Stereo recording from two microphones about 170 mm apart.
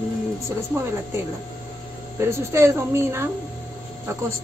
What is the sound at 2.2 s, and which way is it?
Speech, 15° right (ahead or behind).